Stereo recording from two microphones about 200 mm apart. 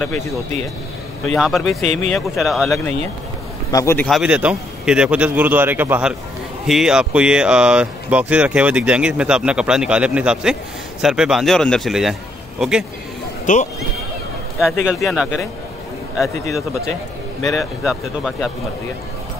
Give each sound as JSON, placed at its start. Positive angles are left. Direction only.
{"t": 1.2, "sound": "speech", "side_deg": 0}
{"t": 1.9, "sound": "speech", "side_deg": -35}
{"t": 2.1, "sound": "speech", "side_deg": 0}
{"t": 3.7, "sound": "a man's voice", "side_deg": 10}
{"t": 4.1, "sound": "a man's voice", "side_deg": -5}
{"t": 13.5, "sound": "speech", "side_deg": 40}
{"t": 14.6, "sound": "speech", "side_deg": 0}
{"t": 17.6, "sound": "speech", "side_deg": 0}